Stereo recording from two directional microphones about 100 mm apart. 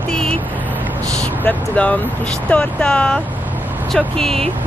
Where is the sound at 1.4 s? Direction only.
15° left (ahead or behind).